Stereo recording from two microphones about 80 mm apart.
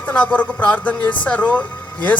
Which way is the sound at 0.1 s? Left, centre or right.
Centre.